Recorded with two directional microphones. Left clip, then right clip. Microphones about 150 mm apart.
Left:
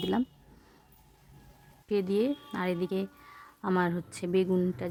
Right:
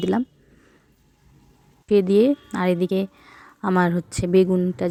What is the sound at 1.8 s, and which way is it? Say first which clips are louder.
Speech: right 12 dB; 30° right (ahead or behind).